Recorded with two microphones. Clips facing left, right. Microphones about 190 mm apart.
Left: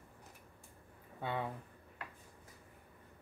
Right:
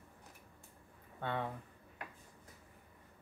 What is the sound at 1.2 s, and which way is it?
Speech, 10° left (ahead or behind).